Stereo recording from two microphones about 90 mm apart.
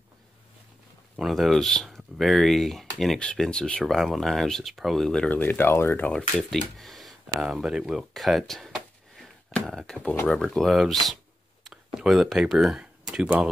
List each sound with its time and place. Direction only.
1.1 s speech: centre (ahead or behind)
3.8 s speech: centre (ahead or behind)
5.3 s speech: 20° left (ahead or behind)
6.0 s speech: 5° left (ahead or behind)
11.6 s a sound: 5° right (ahead or behind)